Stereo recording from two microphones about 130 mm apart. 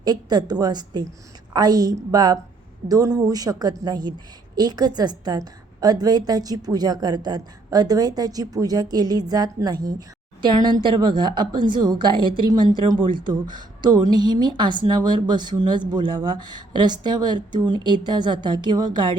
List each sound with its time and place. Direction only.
0.0 s a woman's voice: 30° right (ahead or behind)